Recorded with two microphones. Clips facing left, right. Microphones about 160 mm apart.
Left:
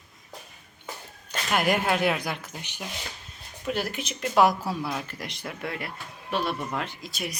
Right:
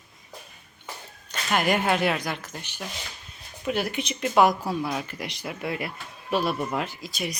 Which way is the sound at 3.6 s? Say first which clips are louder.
Right 3 dB; centre (ahead or behind).